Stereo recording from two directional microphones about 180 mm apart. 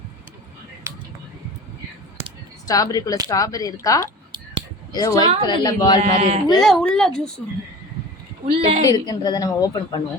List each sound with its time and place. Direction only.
2.6 s a woman's voice: 20° left (ahead or behind)
6.0 s speech: 35° right (ahead or behind)
6.6 s a woman's voice: centre (ahead or behind)
8.4 s speech: 35° right (ahead or behind)
8.9 s a woman's voice: 20° left (ahead or behind)